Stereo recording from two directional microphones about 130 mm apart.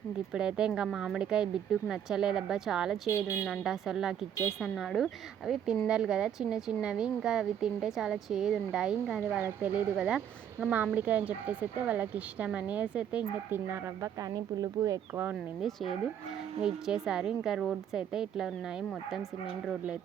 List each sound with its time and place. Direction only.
0.3 s a woman's voice: 5° right (ahead or behind)
3.1 s speech: 20° left (ahead or behind)
3.4 s a woman's voice: centre (ahead or behind)
14.2 s speech: 30° right (ahead or behind)
15.1 s speech: 15° right (ahead or behind)
15.6 s a woman's voice: centre (ahead or behind)